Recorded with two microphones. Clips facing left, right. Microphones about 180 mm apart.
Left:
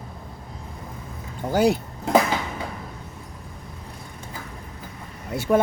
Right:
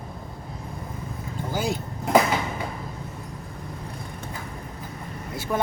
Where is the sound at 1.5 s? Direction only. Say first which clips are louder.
Left 8 dB; 65° left (ahead or behind).